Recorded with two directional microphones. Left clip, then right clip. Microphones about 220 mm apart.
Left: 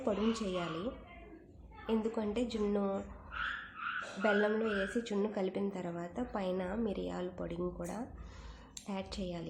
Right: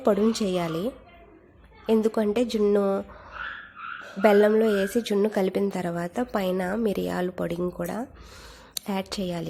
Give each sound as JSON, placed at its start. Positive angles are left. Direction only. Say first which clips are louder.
{"t": 0.0, "sound": "speech", "louder": "right 12 dB", "side_deg": -35}
{"t": 1.9, "sound": "speech", "louder": "right 13 dB", "side_deg": -35}
{"t": 4.2, "sound": "a woman's voice", "louder": "right 13 dB", "side_deg": -35}